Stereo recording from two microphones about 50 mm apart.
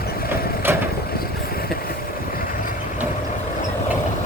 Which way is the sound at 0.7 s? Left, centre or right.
Right.